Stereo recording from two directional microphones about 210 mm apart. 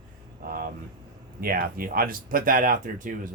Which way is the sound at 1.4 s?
45° right (ahead or behind).